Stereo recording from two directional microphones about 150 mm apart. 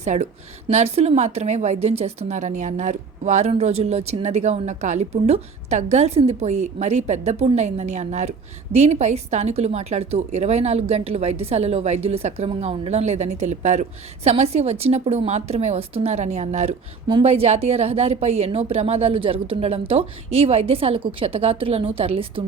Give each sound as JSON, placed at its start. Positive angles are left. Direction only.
{"t": 0.0, "sound": "a woman's voice", "side_deg": -50}